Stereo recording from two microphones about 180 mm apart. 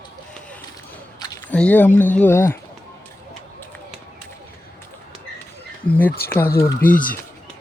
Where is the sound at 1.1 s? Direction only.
20° left (ahead or behind).